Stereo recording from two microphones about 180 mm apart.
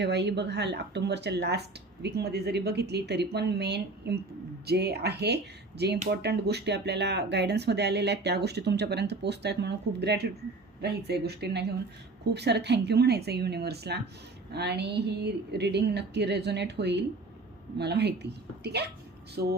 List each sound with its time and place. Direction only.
0.0 s a woman's voice: 70° right (ahead or behind)